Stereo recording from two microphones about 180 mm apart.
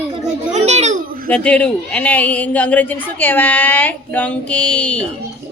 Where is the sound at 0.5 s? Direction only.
40° right (ahead or behind).